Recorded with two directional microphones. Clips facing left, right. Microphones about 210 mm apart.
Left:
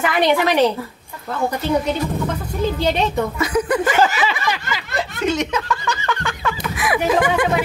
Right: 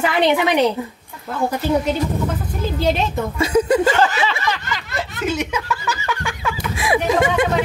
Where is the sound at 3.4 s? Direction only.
25° right (ahead or behind).